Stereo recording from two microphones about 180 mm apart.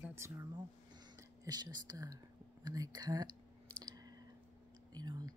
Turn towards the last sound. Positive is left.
turn(degrees=-25)  # may be behind; listen again after turning